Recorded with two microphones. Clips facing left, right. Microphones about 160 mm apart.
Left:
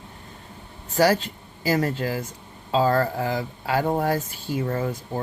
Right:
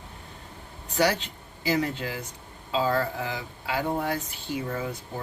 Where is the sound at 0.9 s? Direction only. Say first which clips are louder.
Left 5 dB; 45° left (ahead or behind).